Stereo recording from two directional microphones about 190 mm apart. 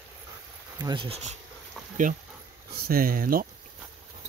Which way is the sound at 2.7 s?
50° right (ahead or behind).